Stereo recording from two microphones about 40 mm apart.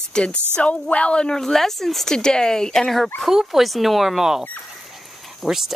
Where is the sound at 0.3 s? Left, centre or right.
Right.